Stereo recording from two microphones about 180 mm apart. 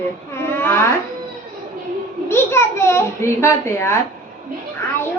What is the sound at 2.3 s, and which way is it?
A child's voice, 15° left (ahead or behind).